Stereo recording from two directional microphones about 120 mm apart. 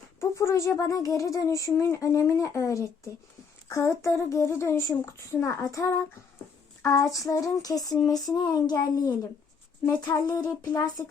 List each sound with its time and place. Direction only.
0.2 s a child's voice: 20° left (ahead or behind)
6.8 s female singing: 25° left (ahead or behind)
9.8 s a child's voice: 30° left (ahead or behind)